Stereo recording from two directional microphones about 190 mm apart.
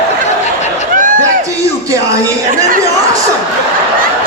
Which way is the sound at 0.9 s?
45° right (ahead or behind).